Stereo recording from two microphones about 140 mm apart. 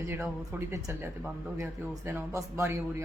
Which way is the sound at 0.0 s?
20° right (ahead or behind).